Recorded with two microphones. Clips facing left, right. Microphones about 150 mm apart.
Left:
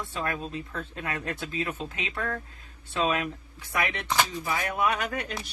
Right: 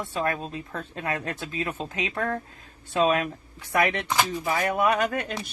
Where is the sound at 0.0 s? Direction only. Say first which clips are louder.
Right 4 dB; 40° right (ahead or behind).